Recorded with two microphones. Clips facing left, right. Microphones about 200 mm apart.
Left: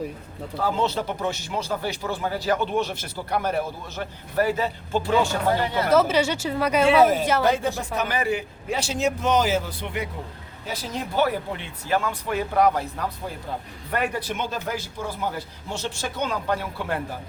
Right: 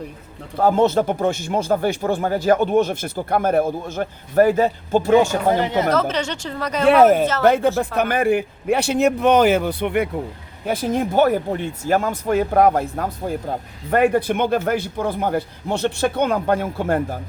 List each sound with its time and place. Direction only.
0.6 s speech: 50° right (ahead or behind)
5.6 s speech: 20° right (ahead or behind)
5.9 s speech: 10° left (ahead or behind)
6.8 s speech: 55° right (ahead or behind)